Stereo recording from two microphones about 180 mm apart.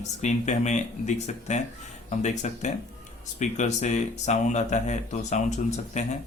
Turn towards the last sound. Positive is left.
turn(degrees=40)  # may be behind; listen again after turning